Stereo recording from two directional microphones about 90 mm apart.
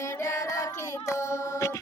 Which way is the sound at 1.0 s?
35° left (ahead or behind).